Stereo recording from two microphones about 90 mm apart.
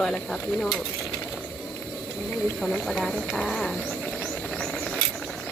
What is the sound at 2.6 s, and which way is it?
Speech, 5° left (ahead or behind).